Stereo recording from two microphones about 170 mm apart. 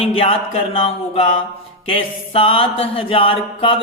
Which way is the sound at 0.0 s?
35° left (ahead or behind).